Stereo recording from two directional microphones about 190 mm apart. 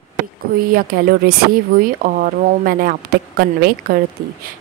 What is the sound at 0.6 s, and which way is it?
Speech, 50° right (ahead or behind).